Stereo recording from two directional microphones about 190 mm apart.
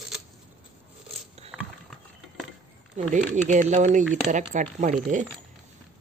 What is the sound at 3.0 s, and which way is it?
Speech, 35° right (ahead or behind).